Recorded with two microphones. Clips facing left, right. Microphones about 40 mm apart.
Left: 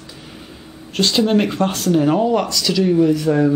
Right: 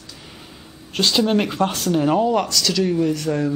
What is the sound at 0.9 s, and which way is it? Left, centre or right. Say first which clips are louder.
Speech: left 2 dB; centre.